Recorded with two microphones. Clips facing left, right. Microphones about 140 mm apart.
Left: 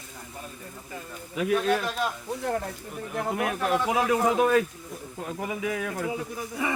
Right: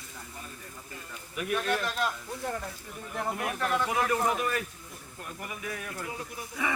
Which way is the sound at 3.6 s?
20° left (ahead or behind).